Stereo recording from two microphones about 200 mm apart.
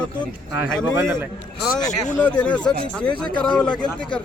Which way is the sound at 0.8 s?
15° right (ahead or behind).